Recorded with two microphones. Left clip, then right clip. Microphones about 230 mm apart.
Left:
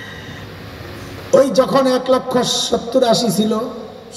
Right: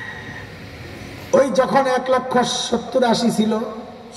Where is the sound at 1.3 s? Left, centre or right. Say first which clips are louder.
Left 3 dB; left.